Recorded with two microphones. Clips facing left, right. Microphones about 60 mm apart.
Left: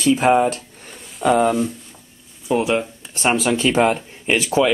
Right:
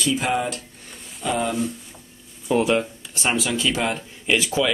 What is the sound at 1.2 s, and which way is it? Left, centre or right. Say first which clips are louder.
Speech: left 8 dB; left.